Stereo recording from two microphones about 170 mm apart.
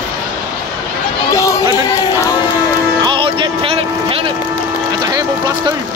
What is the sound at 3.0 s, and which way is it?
Music, 30° right (ahead or behind).